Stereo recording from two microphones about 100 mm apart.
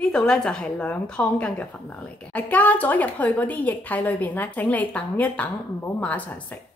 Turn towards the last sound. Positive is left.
turn(degrees=15)  # may be behind; listen again after turning